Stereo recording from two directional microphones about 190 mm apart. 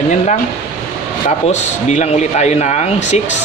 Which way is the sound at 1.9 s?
35° left (ahead or behind).